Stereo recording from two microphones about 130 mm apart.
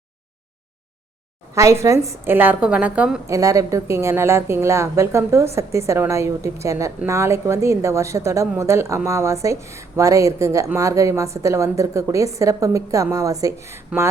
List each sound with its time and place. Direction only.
1.5 s a woman's voice: 20° right (ahead or behind)
3.2 s a woman's voice: 25° right (ahead or behind)